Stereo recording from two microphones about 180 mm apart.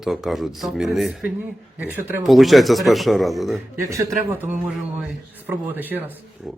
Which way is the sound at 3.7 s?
15° right (ahead or behind).